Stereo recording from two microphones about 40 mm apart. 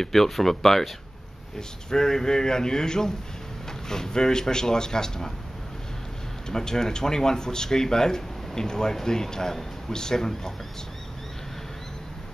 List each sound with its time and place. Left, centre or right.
0.0 s speech: centre
1.9 s speech: centre
6.5 s speech: centre